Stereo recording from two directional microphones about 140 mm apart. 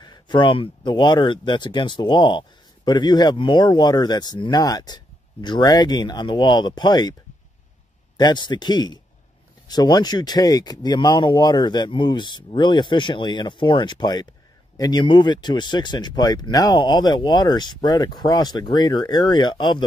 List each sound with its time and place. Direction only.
0.0 s speech: 30° left (ahead or behind)
8.2 s speech: 30° left (ahead or behind)